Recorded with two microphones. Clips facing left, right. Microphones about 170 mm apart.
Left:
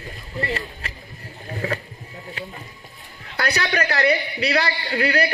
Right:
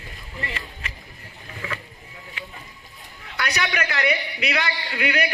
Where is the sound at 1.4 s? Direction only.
40° left (ahead or behind).